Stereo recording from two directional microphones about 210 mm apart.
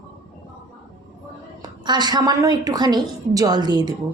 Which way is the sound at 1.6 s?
20° right (ahead or behind).